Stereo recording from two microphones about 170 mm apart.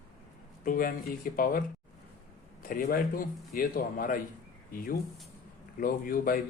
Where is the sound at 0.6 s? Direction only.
55° left (ahead or behind).